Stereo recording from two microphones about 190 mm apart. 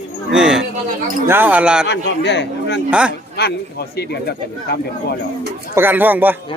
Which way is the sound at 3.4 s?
60° left (ahead or behind).